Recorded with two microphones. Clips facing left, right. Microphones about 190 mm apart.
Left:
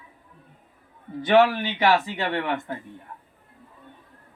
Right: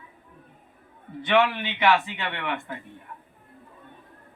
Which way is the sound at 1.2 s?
40° left (ahead or behind).